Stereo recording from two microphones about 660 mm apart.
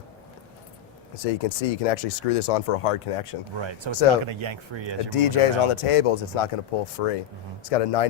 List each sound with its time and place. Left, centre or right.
1.2 s speech: left
3.6 s speech: right
5.1 s speech: left